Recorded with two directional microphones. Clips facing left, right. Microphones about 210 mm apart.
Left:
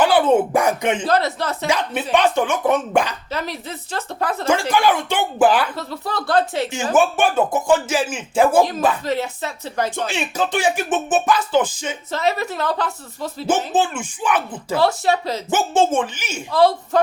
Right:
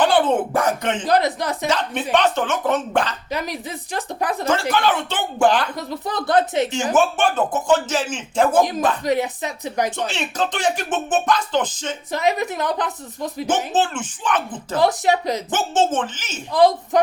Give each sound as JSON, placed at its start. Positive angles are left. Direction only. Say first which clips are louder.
{"t": 0.0, "sound": "speech", "louder": "left 2 dB", "side_deg": 10}
{"t": 1.0, "sound": "speech", "louder": "right 1 dB", "side_deg": -15}
{"t": 1.6, "sound": "speech", "louder": "left 2 dB", "side_deg": 10}
{"t": 3.3, "sound": "speech", "louder": "right 1 dB", "side_deg": -15}
{"t": 4.7, "sound": "speech", "louder": "left 2 dB", "side_deg": 10}
{"t": 5.7, "sound": "speech", "louder": "even", "side_deg": -15}
{"t": 6.9, "sound": "speech", "louder": "left 3 dB", "side_deg": 10}
{"t": 9.0, "sound": "speech", "louder": "right 2 dB", "side_deg": -15}
{"t": 10.1, "sound": "speech", "louder": "left 2 dB", "side_deg": 10}
{"t": 12.1, "sound": "speech", "louder": "right 1 dB", "side_deg": -15}
{"t": 13.7, "sound": "speech", "louder": "left 1 dB", "side_deg": 10}
{"t": 14.8, "sound": "speech", "louder": "even", "side_deg": -15}
{"t": 15.4, "sound": "speech", "louder": "left 4 dB", "side_deg": 10}
{"t": 16.5, "sound": "speech", "louder": "even", "side_deg": -15}